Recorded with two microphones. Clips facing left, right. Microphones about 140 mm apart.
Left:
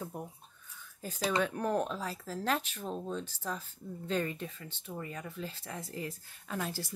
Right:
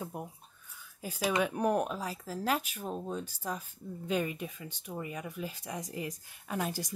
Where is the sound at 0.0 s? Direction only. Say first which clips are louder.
Right 1 dB; 10° right (ahead or behind).